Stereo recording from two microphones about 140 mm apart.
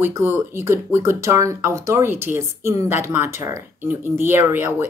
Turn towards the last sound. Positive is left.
turn(degrees=-15)  # may be behind; listen again after turning